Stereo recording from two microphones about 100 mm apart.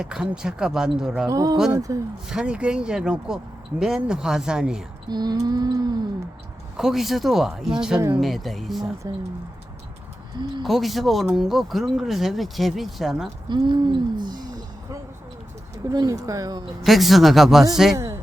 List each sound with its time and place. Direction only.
0.0 s speech: 10° right (ahead or behind)
1.3 s speech: 35° right (ahead or behind)
2.3 s speech: 10° right (ahead or behind)
5.0 s a sound: 45° right (ahead or behind)
6.7 s speech: 5° right (ahead or behind)
10.6 s speech: centre (ahead or behind)
13.5 s speech: 50° right (ahead or behind)
16.8 s speech: centre (ahead or behind)
17.9 s speech: 30° right (ahead or behind)